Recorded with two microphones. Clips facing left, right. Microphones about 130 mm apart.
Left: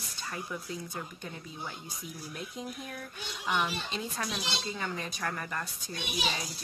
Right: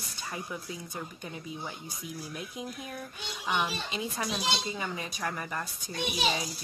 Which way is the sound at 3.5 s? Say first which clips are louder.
Even; 10° right (ahead or behind).